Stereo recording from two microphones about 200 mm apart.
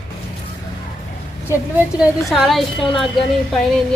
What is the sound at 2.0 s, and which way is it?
A woman's voice, centre (ahead or behind).